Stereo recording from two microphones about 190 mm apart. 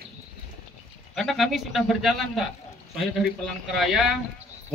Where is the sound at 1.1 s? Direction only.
Centre (ahead or behind).